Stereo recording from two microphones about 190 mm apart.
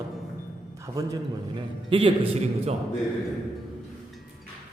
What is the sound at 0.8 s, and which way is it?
A man's voice, 15° right (ahead or behind).